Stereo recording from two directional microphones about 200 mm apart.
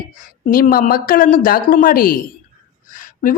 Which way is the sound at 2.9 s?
45° left (ahead or behind).